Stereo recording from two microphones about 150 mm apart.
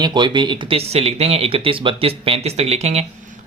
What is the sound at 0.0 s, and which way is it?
Speech, 30° right (ahead or behind).